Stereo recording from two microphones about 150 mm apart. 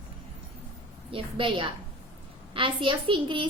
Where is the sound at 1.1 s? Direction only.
35° right (ahead or behind).